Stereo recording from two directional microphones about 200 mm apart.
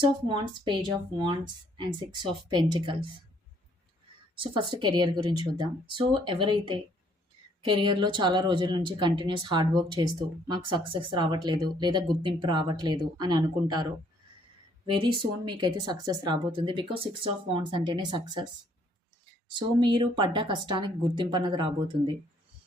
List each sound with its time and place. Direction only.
0.3 s speech: 25° right (ahead or behind)
4.4 s speech: 25° right (ahead or behind)
14.8 s speech: 25° right (ahead or behind)
19.5 s speech: 25° right (ahead or behind)